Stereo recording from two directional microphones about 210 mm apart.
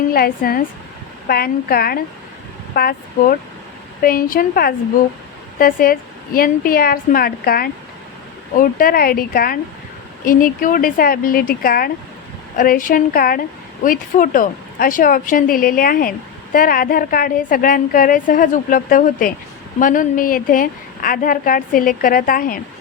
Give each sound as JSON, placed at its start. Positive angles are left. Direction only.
{"t": 0.1, "sound": "a woman's voice", "side_deg": 45}